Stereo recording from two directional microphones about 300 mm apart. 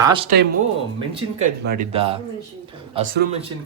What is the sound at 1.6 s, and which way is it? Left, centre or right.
Speech, right.